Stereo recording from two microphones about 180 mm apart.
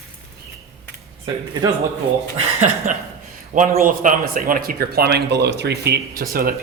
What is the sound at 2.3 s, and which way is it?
A man's voice, 40° right (ahead or behind).